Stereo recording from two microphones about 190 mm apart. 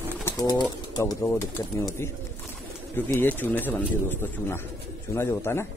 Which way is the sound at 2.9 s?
10° left (ahead or behind).